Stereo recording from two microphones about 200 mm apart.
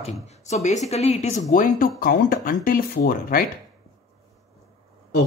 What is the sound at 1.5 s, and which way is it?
Speech, 45° left (ahead or behind).